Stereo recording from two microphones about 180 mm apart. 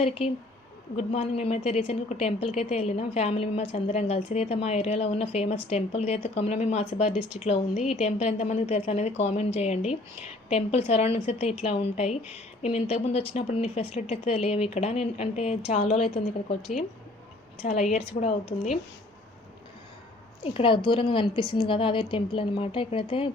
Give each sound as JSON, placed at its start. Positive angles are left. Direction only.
{"t": 0.0, "sound": "a woman's voice", "side_deg": 35}
{"t": 7.1, "sound": "speech", "side_deg": -5}
{"t": 7.4, "sound": "a woman's voice", "side_deg": 35}
{"t": 17.6, "sound": "a woman's voice", "side_deg": 40}
{"t": 20.4, "sound": "a woman's voice", "side_deg": 30}